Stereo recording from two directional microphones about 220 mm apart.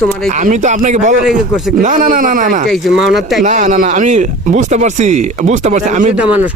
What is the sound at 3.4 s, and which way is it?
Speech, 35° right (ahead or behind).